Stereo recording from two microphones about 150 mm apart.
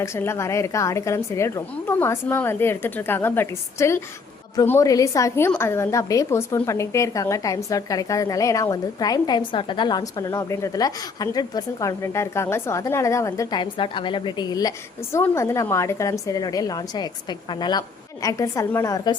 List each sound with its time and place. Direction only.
0.0 s a woman's voice: 15° left (ahead or behind)
13.6 s a woman's voice: 35° left (ahead or behind)